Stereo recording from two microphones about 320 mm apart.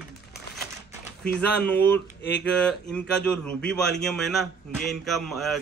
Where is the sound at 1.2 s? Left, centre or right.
Centre.